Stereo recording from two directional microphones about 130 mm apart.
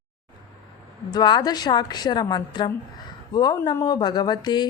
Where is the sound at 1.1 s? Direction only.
35° left (ahead or behind).